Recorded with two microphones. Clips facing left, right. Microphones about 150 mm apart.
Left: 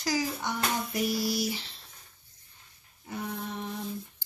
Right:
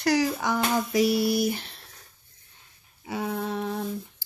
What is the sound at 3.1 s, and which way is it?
Speech, 90° right.